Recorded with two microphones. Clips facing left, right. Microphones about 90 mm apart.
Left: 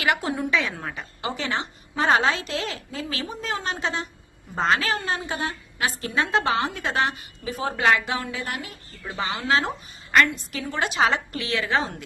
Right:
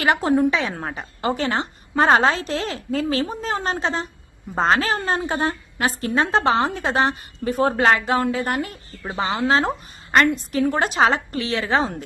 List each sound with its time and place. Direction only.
0.0 s a woman's voice: 35° right (ahead or behind)
7.4 s a woman's voice: 50° right (ahead or behind)